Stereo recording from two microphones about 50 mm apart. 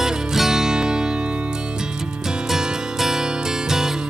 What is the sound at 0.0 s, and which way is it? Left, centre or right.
Music, centre.